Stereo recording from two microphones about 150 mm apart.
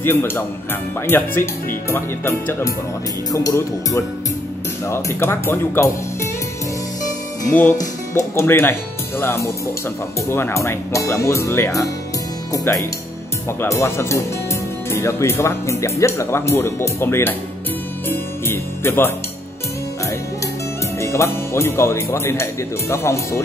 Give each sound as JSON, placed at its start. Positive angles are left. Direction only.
{"t": 0.0, "sound": "speech", "side_deg": 15}
{"t": 7.4, "sound": "speech", "side_deg": 15}
{"t": 18.0, "sound": "music", "side_deg": 15}
{"t": 21.0, "sound": "speech", "side_deg": 20}